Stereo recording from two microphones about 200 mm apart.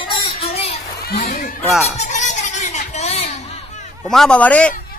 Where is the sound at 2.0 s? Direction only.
35° left (ahead or behind).